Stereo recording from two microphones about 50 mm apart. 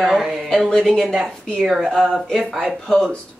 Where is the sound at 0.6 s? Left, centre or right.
Centre.